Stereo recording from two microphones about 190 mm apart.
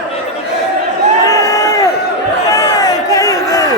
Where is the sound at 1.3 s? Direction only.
15° left (ahead or behind).